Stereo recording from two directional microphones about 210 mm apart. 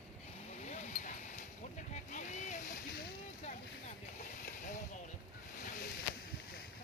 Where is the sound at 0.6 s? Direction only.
35° left (ahead or behind).